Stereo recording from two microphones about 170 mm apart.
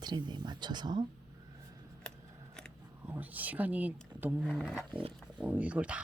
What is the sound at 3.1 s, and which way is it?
Speech, 10° right (ahead or behind).